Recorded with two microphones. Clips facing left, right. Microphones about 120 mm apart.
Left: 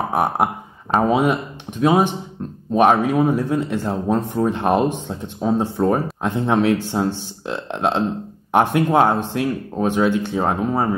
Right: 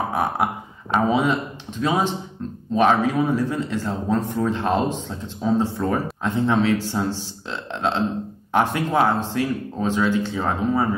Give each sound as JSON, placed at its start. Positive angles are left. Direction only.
{"t": 0.1, "sound": "speech", "side_deg": 55}